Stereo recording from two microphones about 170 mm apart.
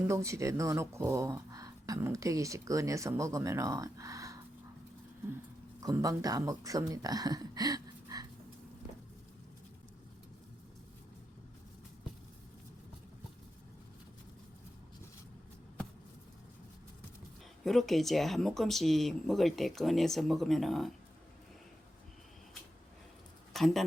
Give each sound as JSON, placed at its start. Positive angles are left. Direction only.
{"t": 0.1, "sound": "speech", "side_deg": -15}
{"t": 5.8, "sound": "speech", "side_deg": -20}
{"t": 17.6, "sound": "speech", "side_deg": 0}
{"t": 23.5, "sound": "speech", "side_deg": 0}